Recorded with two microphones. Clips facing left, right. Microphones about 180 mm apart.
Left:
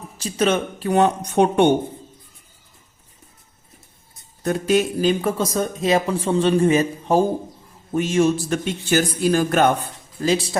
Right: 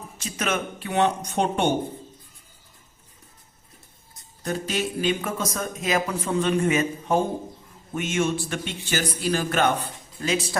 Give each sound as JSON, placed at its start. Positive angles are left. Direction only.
{"t": 0.2, "sound": "speech", "side_deg": 30}
{"t": 4.4, "sound": "speech", "side_deg": 55}
{"t": 10.2, "sound": "speech", "side_deg": 30}